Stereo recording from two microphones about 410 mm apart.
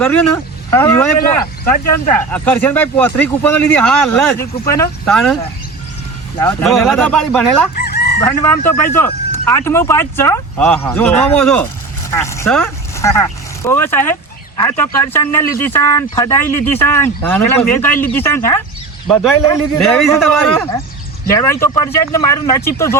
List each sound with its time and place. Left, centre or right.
0.0 s speech: centre
6.4 s speech: centre
7.8 s chicken: left
8.3 s speech: centre